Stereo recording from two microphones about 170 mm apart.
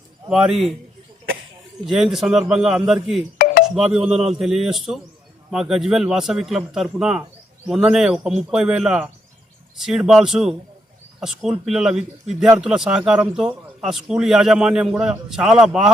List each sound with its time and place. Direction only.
0.3 s speech: 5° right (ahead or behind)
1.9 s speech: 5° right (ahead or behind)
3.3 s a sound: 50° left (ahead or behind)
3.8 s speech: 5° right (ahead or behind)